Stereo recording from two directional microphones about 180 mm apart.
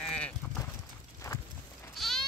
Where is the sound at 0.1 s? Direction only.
5° left (ahead or behind).